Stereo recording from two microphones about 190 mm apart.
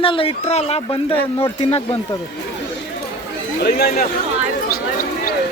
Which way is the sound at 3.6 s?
55° left (ahead or behind).